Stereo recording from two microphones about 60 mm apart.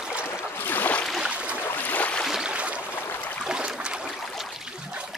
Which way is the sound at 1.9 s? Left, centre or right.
Left.